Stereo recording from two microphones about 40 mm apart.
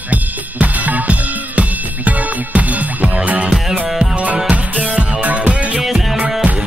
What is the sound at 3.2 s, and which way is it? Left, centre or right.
Music, right.